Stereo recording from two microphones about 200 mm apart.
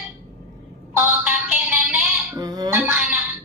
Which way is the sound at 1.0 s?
5° right (ahead or behind).